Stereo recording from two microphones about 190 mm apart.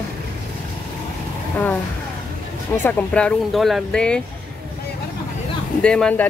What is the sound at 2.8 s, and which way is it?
Speech, 10° left (ahead or behind).